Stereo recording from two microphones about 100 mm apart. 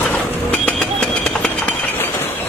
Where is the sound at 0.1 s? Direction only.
15° left (ahead or behind).